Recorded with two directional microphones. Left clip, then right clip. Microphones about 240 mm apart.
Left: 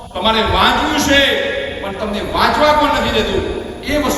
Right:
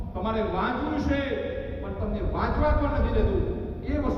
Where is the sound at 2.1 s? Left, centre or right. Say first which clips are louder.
Left 15 dB; left.